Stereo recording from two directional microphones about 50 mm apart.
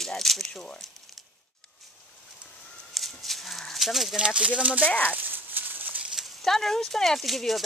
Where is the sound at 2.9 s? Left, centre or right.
Centre.